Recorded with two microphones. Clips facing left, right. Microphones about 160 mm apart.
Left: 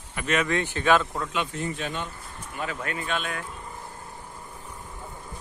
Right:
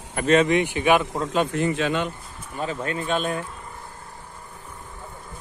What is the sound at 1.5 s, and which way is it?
Speech, 90° right.